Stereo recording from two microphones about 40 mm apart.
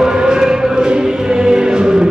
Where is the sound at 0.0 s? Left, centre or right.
Centre.